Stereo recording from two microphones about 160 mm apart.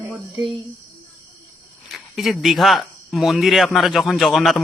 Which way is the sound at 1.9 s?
Centre (ahead or behind).